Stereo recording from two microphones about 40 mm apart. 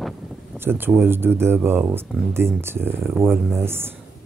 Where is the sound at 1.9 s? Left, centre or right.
Right.